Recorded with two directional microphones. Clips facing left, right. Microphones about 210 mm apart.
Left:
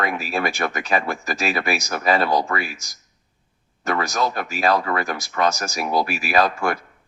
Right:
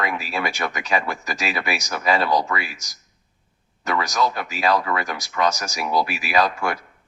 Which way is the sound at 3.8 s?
45° left (ahead or behind).